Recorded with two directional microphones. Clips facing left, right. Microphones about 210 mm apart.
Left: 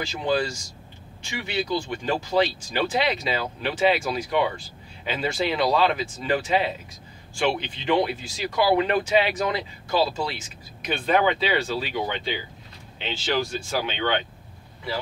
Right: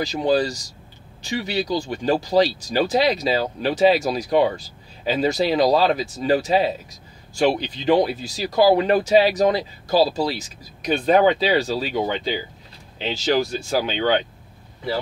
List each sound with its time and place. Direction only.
0.0 s speech: 35° right (ahead or behind)